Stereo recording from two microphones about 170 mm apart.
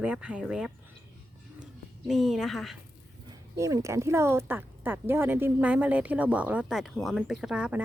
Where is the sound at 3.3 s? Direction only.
20° right (ahead or behind).